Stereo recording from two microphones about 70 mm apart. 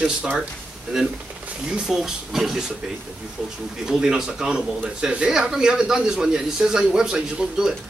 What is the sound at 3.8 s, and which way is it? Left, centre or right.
Speech, centre.